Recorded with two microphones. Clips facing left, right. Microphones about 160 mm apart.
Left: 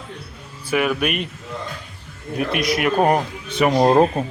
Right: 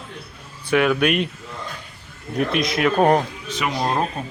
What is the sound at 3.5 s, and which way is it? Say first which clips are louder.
Speech: left 8 dB; 60° left (ahead or behind).